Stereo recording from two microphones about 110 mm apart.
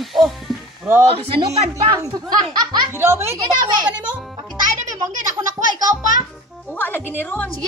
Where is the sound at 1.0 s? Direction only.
60° right (ahead or behind).